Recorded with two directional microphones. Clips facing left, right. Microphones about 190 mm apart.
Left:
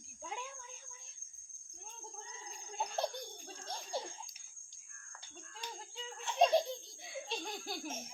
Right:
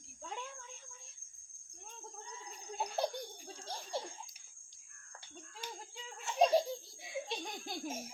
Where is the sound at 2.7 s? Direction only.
5° right (ahead or behind).